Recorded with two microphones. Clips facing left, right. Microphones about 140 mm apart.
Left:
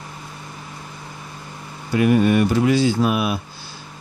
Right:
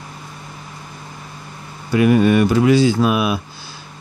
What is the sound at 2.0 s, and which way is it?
Speech, 90° right.